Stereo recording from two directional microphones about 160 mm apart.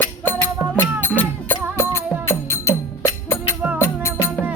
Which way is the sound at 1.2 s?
15° left (ahead or behind).